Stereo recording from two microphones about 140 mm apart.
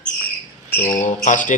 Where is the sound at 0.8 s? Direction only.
60° left (ahead or behind).